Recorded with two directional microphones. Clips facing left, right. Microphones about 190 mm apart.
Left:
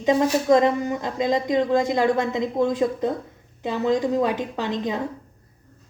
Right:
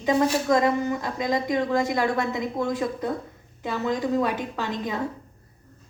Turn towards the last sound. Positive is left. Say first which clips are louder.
# left 3 dB
turn(degrees=20)  # may be behind; listen again after turning